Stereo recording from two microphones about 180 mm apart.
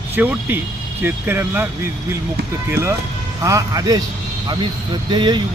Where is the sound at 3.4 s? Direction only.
20° right (ahead or behind).